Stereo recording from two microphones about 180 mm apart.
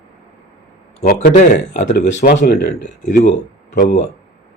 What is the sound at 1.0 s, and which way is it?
Speech, 45° left (ahead or behind).